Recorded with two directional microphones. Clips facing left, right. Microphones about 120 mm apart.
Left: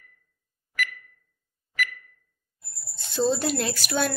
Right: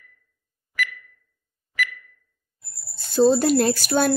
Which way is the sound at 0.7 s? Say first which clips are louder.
Right 2 dB; 45° left (ahead or behind).